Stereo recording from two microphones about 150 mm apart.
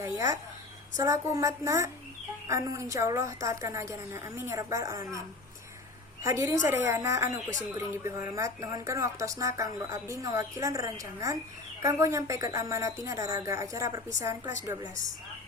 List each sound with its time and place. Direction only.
0.0 s a sound: 20° right (ahead or behind)
0.9 s speech: 20° right (ahead or behind)
6.2 s speech: 20° right (ahead or behind)